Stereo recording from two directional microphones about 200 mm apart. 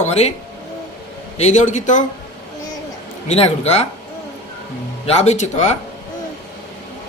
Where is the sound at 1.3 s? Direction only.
35° left (ahead or behind).